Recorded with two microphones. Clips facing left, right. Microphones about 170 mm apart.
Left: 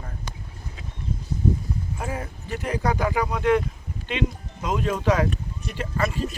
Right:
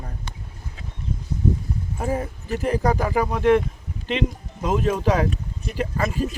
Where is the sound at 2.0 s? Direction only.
40° right (ahead or behind).